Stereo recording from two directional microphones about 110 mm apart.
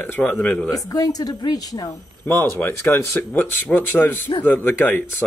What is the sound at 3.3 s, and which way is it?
Speech, 15° left (ahead or behind).